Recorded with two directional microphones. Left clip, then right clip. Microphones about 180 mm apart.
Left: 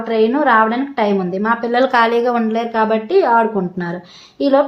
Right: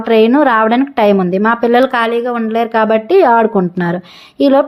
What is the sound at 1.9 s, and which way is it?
Speech, 10° right (ahead or behind).